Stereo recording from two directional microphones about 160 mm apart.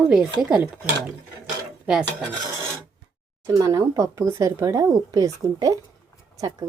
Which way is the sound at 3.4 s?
20° right (ahead or behind).